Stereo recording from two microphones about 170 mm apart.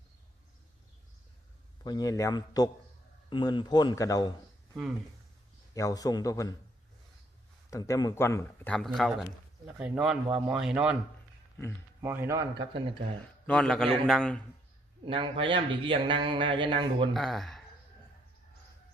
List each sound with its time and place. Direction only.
1.8 s speech: 25° left (ahead or behind)
5.7 s speech: 20° left (ahead or behind)
7.7 s a man's voice: 20° left (ahead or behind); by 10.9 s 5° right (ahead or behind)
12.0 s a man's voice: 15° right (ahead or behind)
13.5 s speech: 5° left (ahead or behind)
15.0 s speech: 30° right (ahead or behind)
17.2 s speech: centre (ahead or behind)